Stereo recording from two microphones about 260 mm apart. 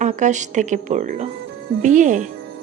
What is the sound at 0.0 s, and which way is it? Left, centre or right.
Speech, right.